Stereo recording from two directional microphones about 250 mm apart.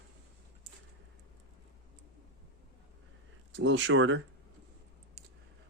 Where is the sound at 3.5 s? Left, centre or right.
Right.